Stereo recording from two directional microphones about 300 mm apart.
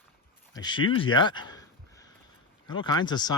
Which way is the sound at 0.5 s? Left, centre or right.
Centre.